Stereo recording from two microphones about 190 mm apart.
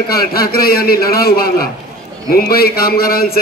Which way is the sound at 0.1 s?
55° left (ahead or behind).